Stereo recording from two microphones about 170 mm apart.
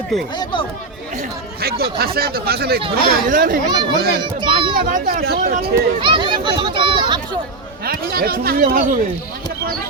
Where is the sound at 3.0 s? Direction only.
55° right (ahead or behind).